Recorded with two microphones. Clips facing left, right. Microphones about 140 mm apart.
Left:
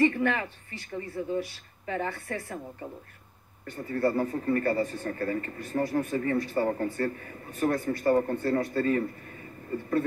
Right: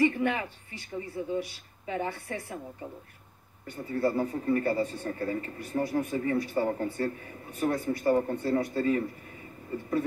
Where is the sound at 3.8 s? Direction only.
10° right (ahead or behind).